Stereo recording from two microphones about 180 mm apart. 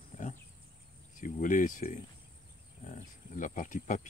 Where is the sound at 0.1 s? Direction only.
45° left (ahead or behind).